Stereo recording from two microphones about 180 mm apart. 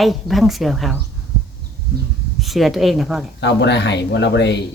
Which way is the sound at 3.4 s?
75° left (ahead or behind).